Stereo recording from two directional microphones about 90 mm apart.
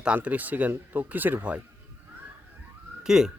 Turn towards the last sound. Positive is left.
turn(degrees=-5)  # may be behind; listen again after turning